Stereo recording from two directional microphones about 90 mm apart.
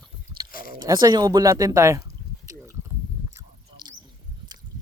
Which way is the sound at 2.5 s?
40° right (ahead or behind).